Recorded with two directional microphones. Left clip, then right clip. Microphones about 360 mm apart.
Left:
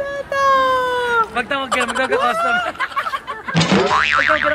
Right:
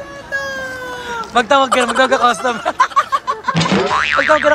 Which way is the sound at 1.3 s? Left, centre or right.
Centre.